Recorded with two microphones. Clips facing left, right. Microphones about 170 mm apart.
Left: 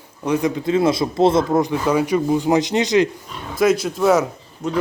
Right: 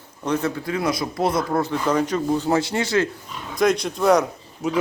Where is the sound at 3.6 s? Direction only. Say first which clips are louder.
Left 3 dB; 5° left (ahead or behind).